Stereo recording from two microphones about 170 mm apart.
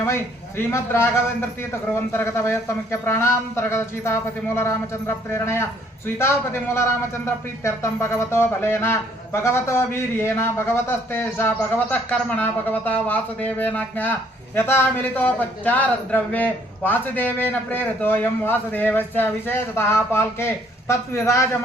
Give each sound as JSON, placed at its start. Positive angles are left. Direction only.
{"t": 0.0, "sound": "a man's voice", "side_deg": 15}